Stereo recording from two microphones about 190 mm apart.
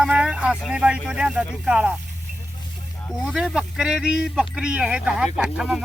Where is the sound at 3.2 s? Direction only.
5° right (ahead or behind).